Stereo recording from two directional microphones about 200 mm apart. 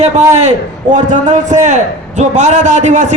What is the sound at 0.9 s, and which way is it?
A man's voice, 40° right (ahead or behind).